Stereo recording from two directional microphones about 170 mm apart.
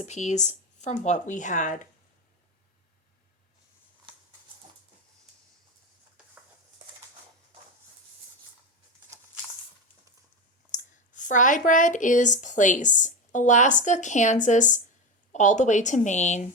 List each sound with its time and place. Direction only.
0.0 s speech: 40° left (ahead or behind)
4.1 s a sound: 30° right (ahead or behind)
10.7 s speech: 50° left (ahead or behind)